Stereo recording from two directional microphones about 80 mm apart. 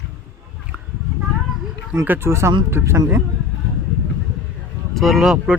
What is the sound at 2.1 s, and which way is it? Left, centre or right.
Speech, right.